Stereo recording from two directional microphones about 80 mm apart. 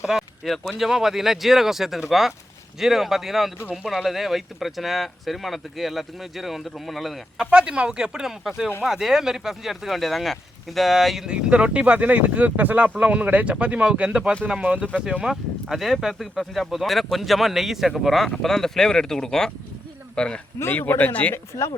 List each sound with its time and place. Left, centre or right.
0.0 s speech: centre
7.3 s speech: centre
20.6 s speech: left